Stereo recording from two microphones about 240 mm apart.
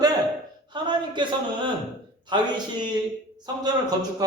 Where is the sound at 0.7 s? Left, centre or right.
Centre.